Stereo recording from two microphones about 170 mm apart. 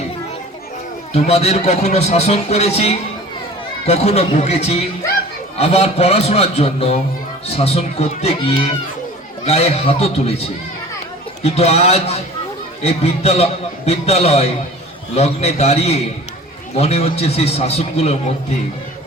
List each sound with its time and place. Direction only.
1.1 s a man's voice: 35° left (ahead or behind)
11.4 s a man's voice: 40° left (ahead or behind)